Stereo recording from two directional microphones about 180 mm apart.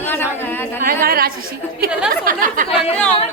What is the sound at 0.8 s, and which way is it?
A woman's voice, 55° right (ahead or behind).